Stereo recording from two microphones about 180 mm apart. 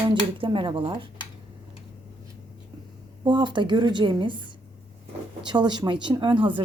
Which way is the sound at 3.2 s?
25° right (ahead or behind).